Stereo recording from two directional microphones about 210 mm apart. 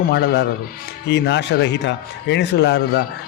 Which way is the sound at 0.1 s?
50° left (ahead or behind).